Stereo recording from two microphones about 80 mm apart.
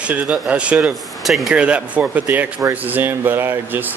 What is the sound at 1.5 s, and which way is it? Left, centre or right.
Speech, centre.